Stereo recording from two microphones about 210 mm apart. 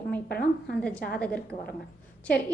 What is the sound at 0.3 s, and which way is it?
Speech, 45° left (ahead or behind).